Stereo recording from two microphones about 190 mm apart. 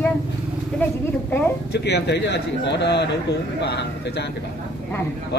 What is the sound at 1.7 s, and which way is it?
A man's voice, 60° left (ahead or behind).